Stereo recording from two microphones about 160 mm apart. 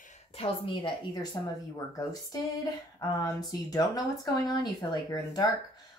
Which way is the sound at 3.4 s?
25° left (ahead or behind).